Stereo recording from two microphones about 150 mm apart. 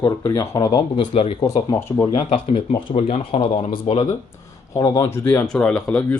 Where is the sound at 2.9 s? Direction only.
45° left (ahead or behind).